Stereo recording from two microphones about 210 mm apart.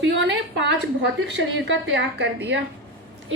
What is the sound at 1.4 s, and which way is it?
A woman's voice, 55° right (ahead or behind).